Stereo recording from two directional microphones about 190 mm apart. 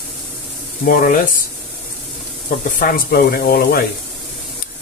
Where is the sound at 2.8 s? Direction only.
50° left (ahead or behind).